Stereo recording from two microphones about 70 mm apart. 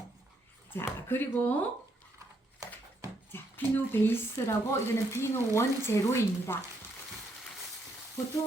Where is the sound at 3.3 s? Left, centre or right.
Left.